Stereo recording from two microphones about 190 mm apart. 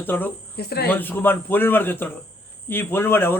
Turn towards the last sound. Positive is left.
turn(degrees=10)  # may be behind; listen again after turning